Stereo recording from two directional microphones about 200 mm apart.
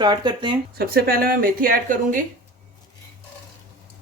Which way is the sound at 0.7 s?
50° right (ahead or behind).